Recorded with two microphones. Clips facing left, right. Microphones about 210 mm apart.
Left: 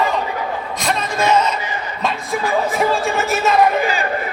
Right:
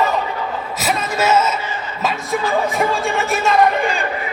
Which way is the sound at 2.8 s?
Centre (ahead or behind).